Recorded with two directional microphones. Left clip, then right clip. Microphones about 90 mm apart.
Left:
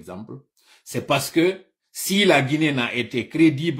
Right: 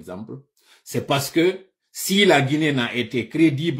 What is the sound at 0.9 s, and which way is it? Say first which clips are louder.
Speech: even; 30° left (ahead or behind).